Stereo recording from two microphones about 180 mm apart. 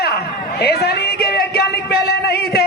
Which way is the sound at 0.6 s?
65° left (ahead or behind).